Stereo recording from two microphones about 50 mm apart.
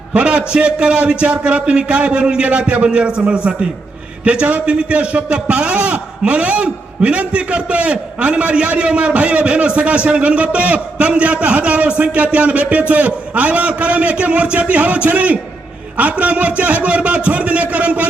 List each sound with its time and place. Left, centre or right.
0.1 s a man's voice: right